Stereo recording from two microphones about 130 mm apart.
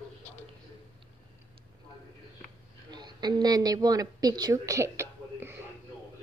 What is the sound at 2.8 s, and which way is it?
A woman's voice, 35° right (ahead or behind).